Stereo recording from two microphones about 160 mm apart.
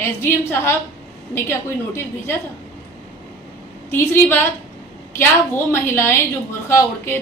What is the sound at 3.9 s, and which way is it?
A woman's voice, 15° left (ahead or behind).